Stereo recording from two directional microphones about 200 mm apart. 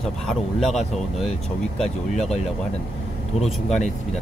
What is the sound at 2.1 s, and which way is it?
Speech, 35° left (ahead or behind).